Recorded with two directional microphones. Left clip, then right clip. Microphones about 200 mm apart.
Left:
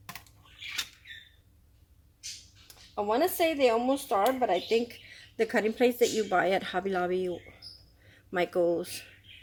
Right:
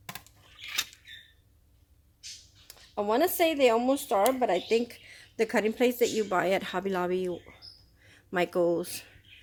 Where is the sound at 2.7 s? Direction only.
35° right (ahead or behind).